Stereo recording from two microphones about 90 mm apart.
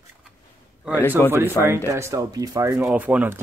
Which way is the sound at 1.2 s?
25° left (ahead or behind).